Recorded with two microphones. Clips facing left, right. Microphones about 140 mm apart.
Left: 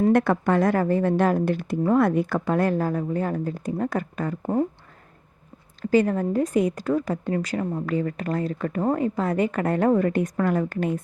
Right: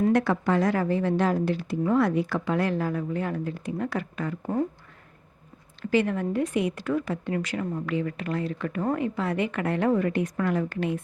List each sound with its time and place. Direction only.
0.1 s speech: 55° left (ahead or behind)
5.8 s a woman's voice: 40° left (ahead or behind)